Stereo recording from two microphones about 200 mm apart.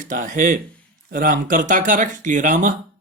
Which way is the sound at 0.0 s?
40° right (ahead or behind).